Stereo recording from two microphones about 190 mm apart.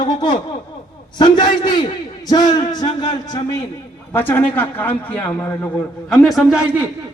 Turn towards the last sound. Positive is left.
turn(degrees=-5)  # may be behind; listen again after turning